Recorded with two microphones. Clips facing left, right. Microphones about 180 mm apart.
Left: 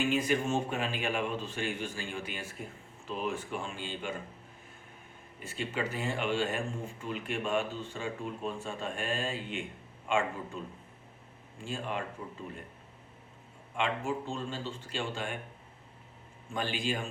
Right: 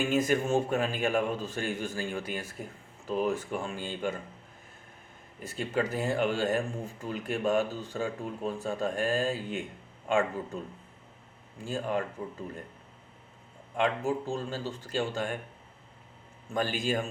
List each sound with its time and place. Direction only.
0.0 s speech: 45° right (ahead or behind)
5.4 s speech: 40° right (ahead or behind)
11.6 s speech: 40° right (ahead or behind)
13.7 s speech: 40° right (ahead or behind)
16.6 s a man's voice: 45° right (ahead or behind)